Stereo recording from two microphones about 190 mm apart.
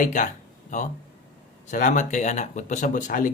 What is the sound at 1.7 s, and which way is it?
Speech, 40° left (ahead or behind).